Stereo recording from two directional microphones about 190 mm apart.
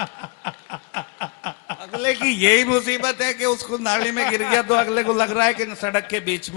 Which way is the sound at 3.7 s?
10° left (ahead or behind).